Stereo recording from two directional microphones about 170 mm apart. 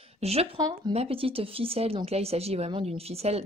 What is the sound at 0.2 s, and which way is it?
Speech, 35° right (ahead or behind).